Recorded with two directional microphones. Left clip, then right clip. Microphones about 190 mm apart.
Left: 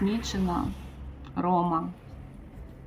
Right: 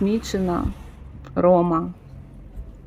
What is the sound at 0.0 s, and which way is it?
Speech, 30° right (ahead or behind).